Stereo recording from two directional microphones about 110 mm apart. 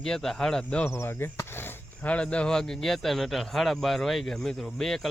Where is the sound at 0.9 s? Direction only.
25° left (ahead or behind).